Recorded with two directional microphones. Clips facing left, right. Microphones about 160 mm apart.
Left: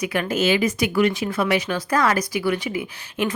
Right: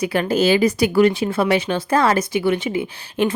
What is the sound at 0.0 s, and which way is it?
Speech, 30° right (ahead or behind).